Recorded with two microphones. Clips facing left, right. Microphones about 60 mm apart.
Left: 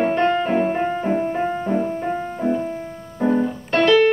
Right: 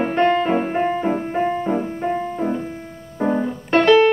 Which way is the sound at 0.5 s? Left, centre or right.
Centre.